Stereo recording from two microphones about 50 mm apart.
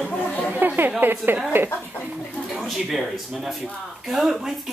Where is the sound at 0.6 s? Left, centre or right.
Right.